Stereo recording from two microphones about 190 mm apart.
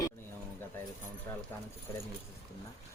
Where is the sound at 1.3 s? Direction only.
15° left (ahead or behind).